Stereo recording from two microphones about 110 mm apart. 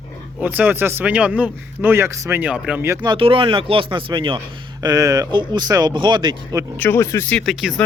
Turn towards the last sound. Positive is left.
turn(degrees=-5)  # may be behind; listen again after turning